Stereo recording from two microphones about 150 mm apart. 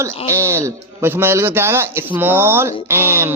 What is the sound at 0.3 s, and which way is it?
A man's voice, 20° right (ahead or behind).